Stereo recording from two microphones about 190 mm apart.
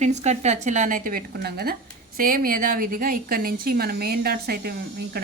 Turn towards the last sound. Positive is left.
turn(degrees=-55)  # may be behind; listen again after turning